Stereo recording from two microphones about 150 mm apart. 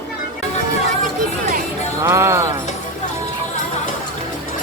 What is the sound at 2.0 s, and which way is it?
Music, 15° right (ahead or behind).